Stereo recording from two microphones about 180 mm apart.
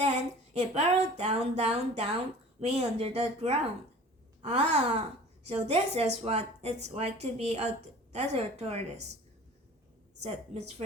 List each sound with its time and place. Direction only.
0.5 s speech: 35° right (ahead or behind)
10.2 s speech: 35° right (ahead or behind)